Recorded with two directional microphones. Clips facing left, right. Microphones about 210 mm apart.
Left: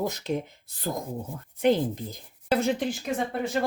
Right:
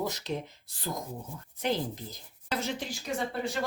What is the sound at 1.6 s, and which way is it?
A woman's voice, 55° left (ahead or behind).